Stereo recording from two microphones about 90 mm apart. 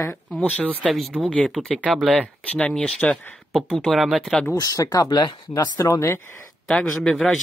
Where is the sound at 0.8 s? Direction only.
Centre (ahead or behind).